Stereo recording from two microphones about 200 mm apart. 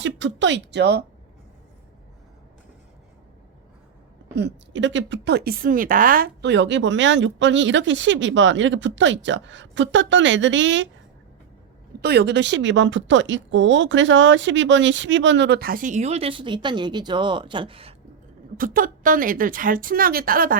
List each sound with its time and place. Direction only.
0.0 s a woman's voice: 65° right (ahead or behind)
4.4 s a woman's voice: 60° right (ahead or behind)
11.9 s a woman's voice: 55° right (ahead or behind); by 17.9 s 25° right (ahead or behind)
18.5 s a woman's voice: 45° right (ahead or behind)